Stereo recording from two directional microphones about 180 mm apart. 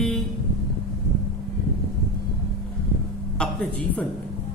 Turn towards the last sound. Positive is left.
turn(degrees=5)  # may be behind; listen again after turning